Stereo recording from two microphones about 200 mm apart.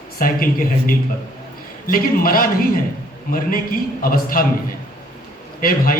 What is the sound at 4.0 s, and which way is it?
Speech, 45° left (ahead or behind).